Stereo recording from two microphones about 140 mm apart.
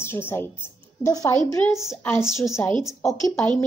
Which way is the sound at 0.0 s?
15° left (ahead or behind).